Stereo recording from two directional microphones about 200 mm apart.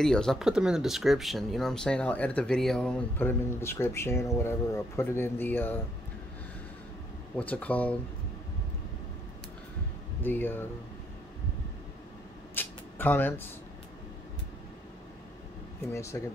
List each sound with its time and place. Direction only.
0.0 s speech: 5° left (ahead or behind)
7.3 s speech: 5° left (ahead or behind)
10.2 s speech: 10° left (ahead or behind)
12.5 s a sound: 10° left (ahead or behind)
15.8 s speech: 15° left (ahead or behind)